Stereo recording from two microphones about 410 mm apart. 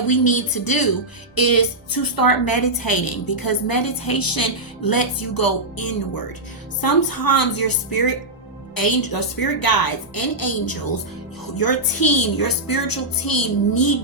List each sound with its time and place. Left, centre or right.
0.1 s a woman's voice: left